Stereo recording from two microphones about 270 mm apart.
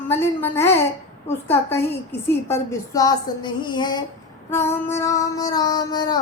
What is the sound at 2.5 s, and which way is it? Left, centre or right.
Music, centre.